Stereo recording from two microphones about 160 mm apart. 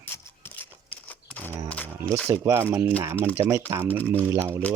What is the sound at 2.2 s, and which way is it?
Speech, 15° right (ahead or behind).